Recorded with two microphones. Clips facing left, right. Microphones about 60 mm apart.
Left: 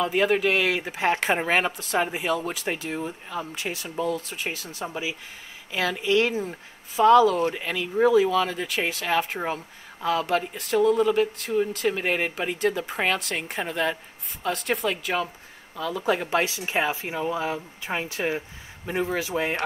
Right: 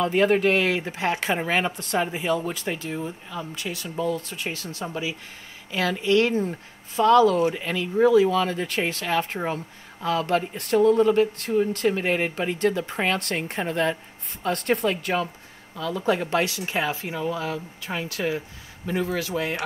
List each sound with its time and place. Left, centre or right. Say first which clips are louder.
0.0 s speech: right 2 dB; centre
1.7 s speech: even; centre
3.9 s speech: right 1 dB; centre
10.8 s speech: right 2 dB; centre; by 19.5 s left